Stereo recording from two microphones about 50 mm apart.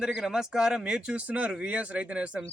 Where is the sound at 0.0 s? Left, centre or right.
Centre.